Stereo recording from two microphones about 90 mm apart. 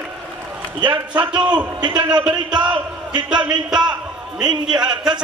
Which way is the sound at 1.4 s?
55° right (ahead or behind).